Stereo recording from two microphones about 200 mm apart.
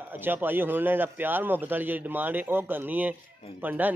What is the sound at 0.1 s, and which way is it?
A man's voice, 10° right (ahead or behind).